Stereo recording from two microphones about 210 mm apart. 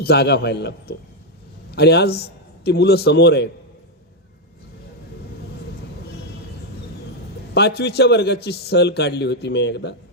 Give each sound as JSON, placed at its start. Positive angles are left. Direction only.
{"t": 0.0, "sound": "a man's voice", "side_deg": 50}
{"t": 7.5, "sound": "a man's voice", "side_deg": 50}